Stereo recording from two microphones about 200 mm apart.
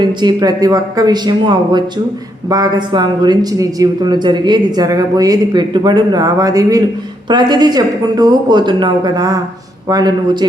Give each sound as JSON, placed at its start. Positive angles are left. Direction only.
{"t": 0.0, "sound": "speech", "side_deg": -20}